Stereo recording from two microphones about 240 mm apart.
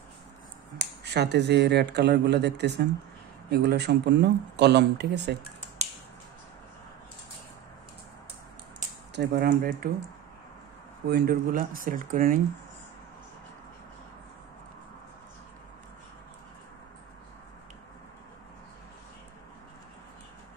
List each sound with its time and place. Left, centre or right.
0.7 s speech: right
9.1 s speech: right
11.1 s speech: right